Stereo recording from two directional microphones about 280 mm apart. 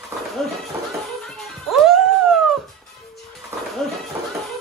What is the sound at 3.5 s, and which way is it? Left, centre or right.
Music, centre.